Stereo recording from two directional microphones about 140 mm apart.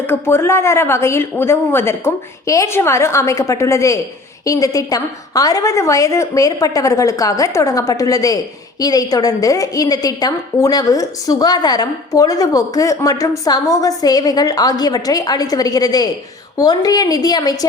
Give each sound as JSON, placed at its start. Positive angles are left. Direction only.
{"t": 0.1, "sound": "a woman's voice", "side_deg": 15}